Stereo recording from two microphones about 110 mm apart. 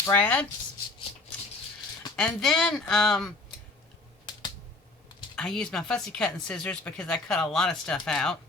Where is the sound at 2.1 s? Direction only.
5° left (ahead or behind).